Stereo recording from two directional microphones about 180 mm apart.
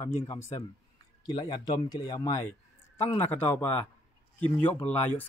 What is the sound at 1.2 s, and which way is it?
Speech, 20° left (ahead or behind).